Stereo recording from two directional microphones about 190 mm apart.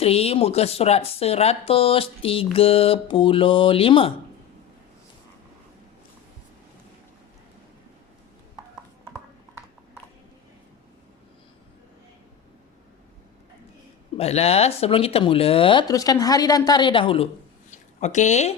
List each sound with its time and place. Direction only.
0.0 s speech: 30° left (ahead or behind)
14.2 s speech: 35° left (ahead or behind)
17.7 s a sound: 40° left (ahead or behind)